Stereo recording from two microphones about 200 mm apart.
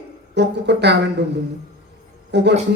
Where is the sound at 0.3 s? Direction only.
60° right (ahead or behind).